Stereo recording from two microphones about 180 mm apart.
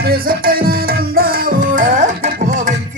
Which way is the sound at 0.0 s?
55° right (ahead or behind).